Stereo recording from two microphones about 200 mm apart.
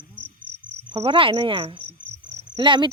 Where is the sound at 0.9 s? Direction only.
25° right (ahead or behind).